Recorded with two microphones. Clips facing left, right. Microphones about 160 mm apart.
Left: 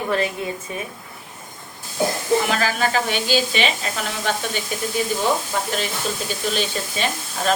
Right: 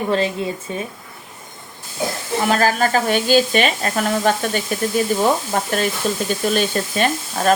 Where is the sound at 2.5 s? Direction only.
45° right (ahead or behind).